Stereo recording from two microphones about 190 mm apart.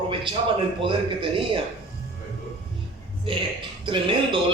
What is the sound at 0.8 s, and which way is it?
Speech, 25° right (ahead or behind).